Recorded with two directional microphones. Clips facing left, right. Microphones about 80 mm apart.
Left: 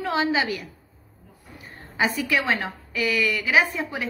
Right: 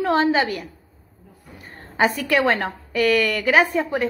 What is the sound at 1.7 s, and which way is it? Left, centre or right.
A woman's voice, right.